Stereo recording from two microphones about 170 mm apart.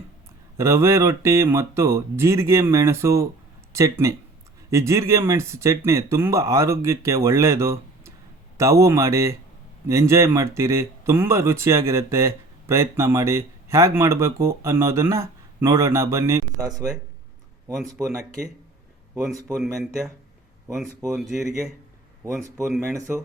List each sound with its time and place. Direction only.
0.5 s speech: 15° right (ahead or behind)
17.7 s speech: 5° right (ahead or behind)
19.5 s speech: centre (ahead or behind)
21.1 s speech: centre (ahead or behind)
22.4 s speech: 20° right (ahead or behind)